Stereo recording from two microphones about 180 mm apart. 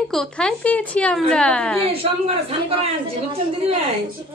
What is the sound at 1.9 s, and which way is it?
Speech, 35° right (ahead or behind).